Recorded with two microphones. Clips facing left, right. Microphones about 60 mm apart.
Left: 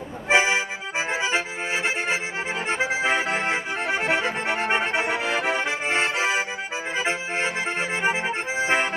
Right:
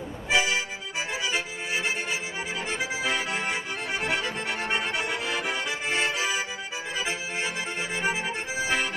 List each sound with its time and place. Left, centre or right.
0.3 s accordion: left